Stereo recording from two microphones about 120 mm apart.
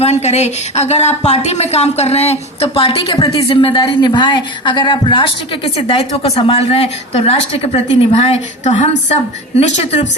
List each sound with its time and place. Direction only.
0.0 s a woman's voice: 65° left (ahead or behind)